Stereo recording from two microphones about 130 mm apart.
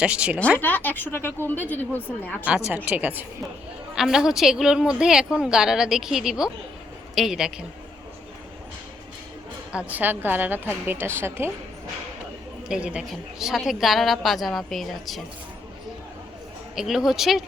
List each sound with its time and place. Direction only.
0.0 s a woman's voice: 10° right (ahead or behind)
0.6 s a woman's voice: 15° left (ahead or behind)
2.6 s a woman's voice: 10° right (ahead or behind)
9.7 s a woman's voice: 15° right (ahead or behind)
12.6 s a woman's voice: 5° right (ahead or behind)
16.7 s a woman's voice: 5° right (ahead or behind)